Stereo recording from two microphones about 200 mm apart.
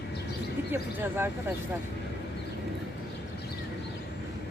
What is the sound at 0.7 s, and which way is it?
Speech, 10° right (ahead or behind).